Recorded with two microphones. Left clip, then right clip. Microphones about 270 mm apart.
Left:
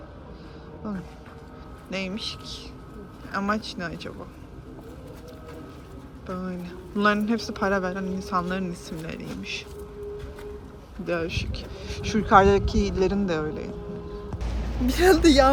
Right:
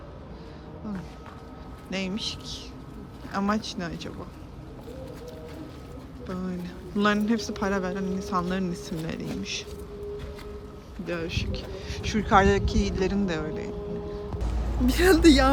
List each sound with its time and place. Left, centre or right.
0.8 s speech: centre
6.2 s speech: centre
11.0 s speech: centre
14.8 s speech: centre